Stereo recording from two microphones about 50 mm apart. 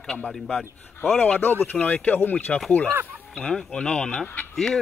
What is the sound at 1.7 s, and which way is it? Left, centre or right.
Speech, centre.